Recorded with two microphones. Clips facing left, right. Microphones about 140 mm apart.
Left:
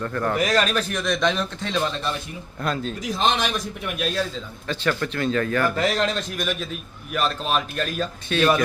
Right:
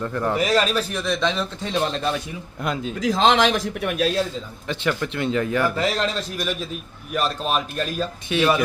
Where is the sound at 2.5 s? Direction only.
15° right (ahead or behind).